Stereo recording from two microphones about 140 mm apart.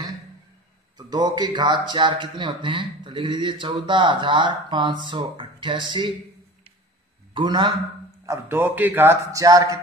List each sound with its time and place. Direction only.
0.9 s a man's voice: 30° right (ahead or behind)
7.3 s a man's voice: 35° right (ahead or behind)
8.3 s a man's voice: 15° right (ahead or behind)